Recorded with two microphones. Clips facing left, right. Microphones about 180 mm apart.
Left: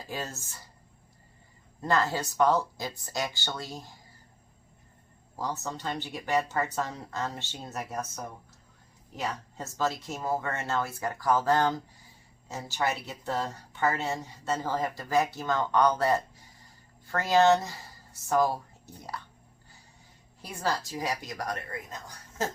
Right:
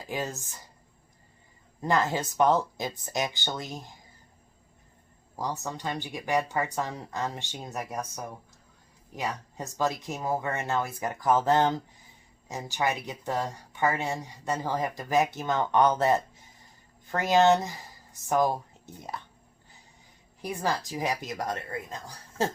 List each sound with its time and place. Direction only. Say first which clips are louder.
0.1 s speech: right 4 dB; 15° right (ahead or behind)
1.8 s a woman's voice: right 1 dB; 15° right (ahead or behind)
5.4 s speech: right 1 dB; 15° right (ahead or behind)
20.4 s a woman's voice: right 2 dB; 15° right (ahead or behind)